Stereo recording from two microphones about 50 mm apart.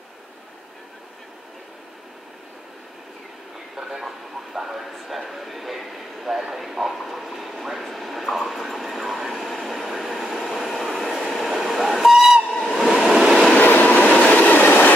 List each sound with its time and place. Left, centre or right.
3.7 s speech: centre
4.6 s a sound: centre
11.5 s steam whistle: centre
12.5 s train: centre
13.6 s train: left